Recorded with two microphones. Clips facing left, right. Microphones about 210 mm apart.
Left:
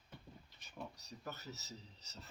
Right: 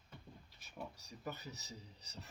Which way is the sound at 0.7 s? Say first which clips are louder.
Even; 10° right (ahead or behind).